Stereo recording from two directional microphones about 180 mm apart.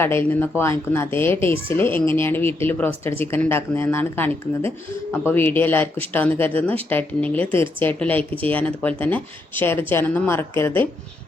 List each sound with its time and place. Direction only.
0.0 s speech: 15° left (ahead or behind)